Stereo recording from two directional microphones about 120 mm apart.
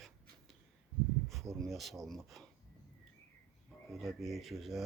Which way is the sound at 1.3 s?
Centre (ahead or behind).